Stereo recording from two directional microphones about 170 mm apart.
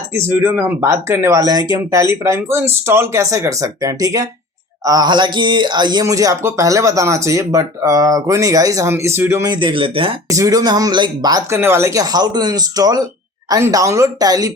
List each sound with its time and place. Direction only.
0.1 s speech: 15° right (ahead or behind); by 10.2 s 30° right (ahead or behind)
10.2 s speech: 20° right (ahead or behind)